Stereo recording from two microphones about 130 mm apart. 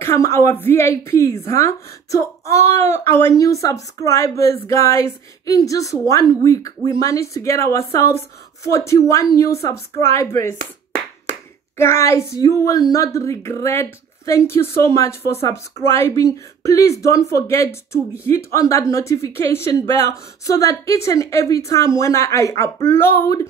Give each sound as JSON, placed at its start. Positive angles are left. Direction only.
{"t": 0.0, "sound": "a woman's voice", "side_deg": 20}
{"t": 11.7, "sound": "a woman's voice", "side_deg": 20}